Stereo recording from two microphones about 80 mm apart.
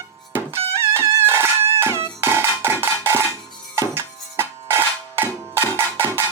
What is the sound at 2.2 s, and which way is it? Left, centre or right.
Cowbell, right.